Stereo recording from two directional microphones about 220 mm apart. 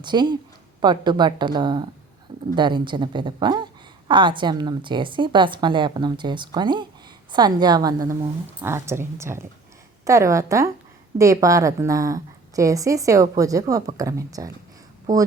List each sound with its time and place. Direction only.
0.0 s a woman's voice: 20° right (ahead or behind)